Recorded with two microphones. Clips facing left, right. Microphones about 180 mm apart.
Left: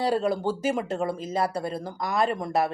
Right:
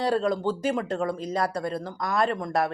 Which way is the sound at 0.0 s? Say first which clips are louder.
Even; 5° left (ahead or behind).